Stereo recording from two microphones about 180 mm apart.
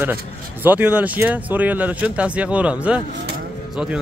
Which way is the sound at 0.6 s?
10° right (ahead or behind).